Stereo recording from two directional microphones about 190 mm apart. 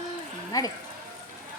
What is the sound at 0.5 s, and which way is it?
Speech, 20° left (ahead or behind).